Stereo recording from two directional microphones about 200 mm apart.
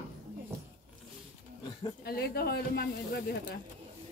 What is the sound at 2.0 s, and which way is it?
Speech, 50° left (ahead or behind).